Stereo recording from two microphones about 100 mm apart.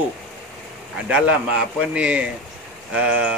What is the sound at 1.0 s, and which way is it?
Speech, 15° right (ahead or behind).